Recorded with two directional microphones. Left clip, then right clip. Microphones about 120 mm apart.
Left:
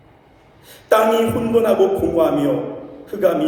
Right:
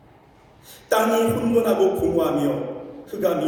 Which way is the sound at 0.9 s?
50° left (ahead or behind).